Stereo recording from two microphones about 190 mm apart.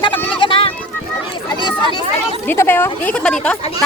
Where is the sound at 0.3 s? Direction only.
25° left (ahead or behind).